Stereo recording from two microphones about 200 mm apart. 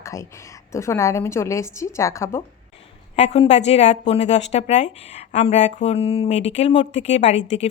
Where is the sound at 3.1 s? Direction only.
30° left (ahead or behind).